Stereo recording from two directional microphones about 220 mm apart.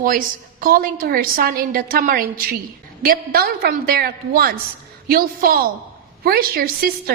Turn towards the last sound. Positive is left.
turn(degrees=-45)  # may be behind; listen again after turning